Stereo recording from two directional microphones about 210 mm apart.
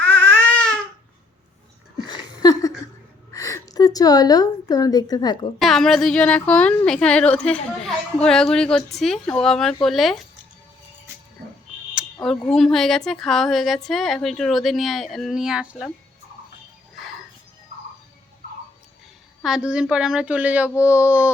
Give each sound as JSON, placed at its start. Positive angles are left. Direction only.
{"t": 0.0, "sound": "baby cry", "side_deg": 10}
{"t": 2.0, "sound": "a sound", "side_deg": 20}
{"t": 3.3, "sound": "a woman's voice", "side_deg": 15}
{"t": 5.5, "sound": "a woman's voice", "side_deg": 0}
{"t": 11.9, "sound": "a sound", "side_deg": 0}
{"t": 12.5, "sound": "a woman's voice", "side_deg": 0}
{"t": 19.4, "sound": "a woman's voice", "side_deg": -5}